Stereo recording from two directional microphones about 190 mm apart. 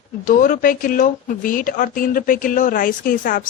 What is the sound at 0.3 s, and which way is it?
A woman's voice, 45° left (ahead or behind).